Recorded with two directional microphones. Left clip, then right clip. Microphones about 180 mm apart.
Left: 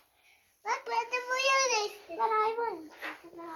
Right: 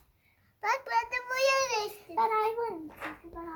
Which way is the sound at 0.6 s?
10° right (ahead or behind).